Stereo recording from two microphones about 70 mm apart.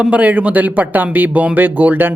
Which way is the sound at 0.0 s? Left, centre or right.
Centre.